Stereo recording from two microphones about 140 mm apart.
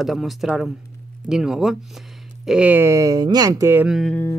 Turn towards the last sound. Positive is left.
turn(degrees=0)  # may be behind; listen again after turning